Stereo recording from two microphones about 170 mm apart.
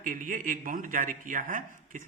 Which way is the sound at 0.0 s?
55° right (ahead or behind).